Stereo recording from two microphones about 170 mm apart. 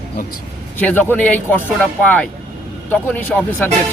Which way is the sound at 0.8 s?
10° left (ahead or behind).